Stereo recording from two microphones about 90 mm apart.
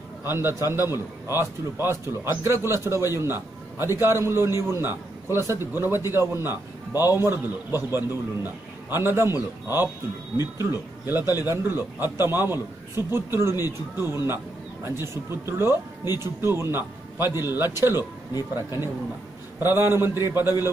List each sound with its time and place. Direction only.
0.2 s a man's voice: 30° right (ahead or behind)
10.6 s a man's voice: 25° right (ahead or behind)